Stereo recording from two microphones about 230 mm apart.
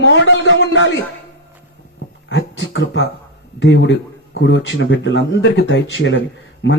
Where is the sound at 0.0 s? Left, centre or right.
Left.